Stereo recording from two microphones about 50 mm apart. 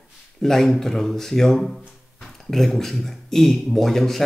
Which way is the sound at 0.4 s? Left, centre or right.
Centre.